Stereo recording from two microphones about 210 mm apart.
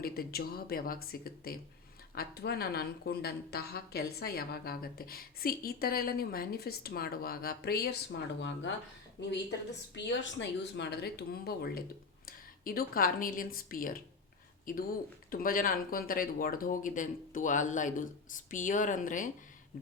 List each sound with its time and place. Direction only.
0.0 s a woman's voice: 45° left (ahead or behind)
8.4 s speech: 60° left (ahead or behind)
9.9 s a woman's voice: 60° left (ahead or behind); by 19.3 s 40° left (ahead or behind)